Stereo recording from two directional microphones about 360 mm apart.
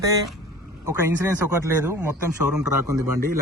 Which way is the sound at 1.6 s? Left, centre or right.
Centre.